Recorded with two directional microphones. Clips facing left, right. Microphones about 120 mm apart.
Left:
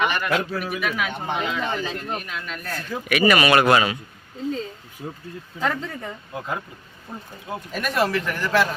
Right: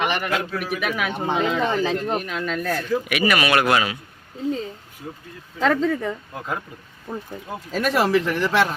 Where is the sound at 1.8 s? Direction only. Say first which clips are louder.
Right 6 dB; 85° right.